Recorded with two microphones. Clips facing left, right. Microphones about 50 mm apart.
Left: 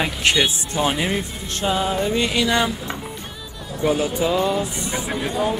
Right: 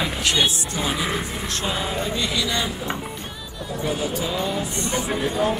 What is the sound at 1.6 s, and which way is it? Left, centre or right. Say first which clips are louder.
Speech: left 6 dB; centre.